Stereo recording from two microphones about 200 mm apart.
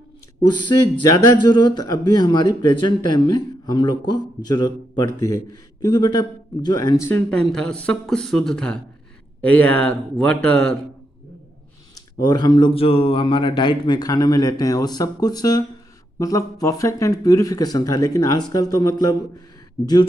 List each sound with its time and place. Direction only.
0.5 s a man's voice: 20° left (ahead or behind); by 10.8 s 5° left (ahead or behind)
11.9 s a man's voice: 20° left (ahead or behind)